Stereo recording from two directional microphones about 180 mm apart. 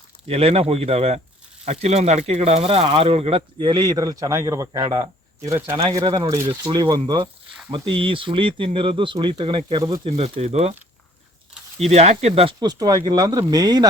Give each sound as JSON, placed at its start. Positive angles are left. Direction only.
{"t": 0.3, "sound": "speech", "side_deg": -35}
{"t": 11.8, "sound": "speech", "side_deg": -35}
{"t": 12.5, "sound": "speech", "side_deg": -20}